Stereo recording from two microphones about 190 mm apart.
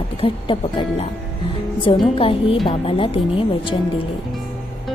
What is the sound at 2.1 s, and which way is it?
A woman's voice, 30° left (ahead or behind).